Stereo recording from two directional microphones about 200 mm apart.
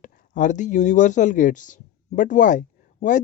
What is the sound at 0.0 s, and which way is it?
Speech, 40° left (ahead or behind).